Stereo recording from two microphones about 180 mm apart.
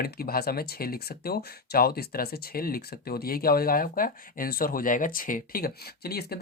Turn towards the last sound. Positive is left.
turn(degrees=60)  # may be behind; listen again after turning